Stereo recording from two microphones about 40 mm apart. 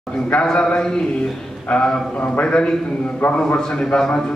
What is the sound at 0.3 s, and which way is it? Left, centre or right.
Speech, left.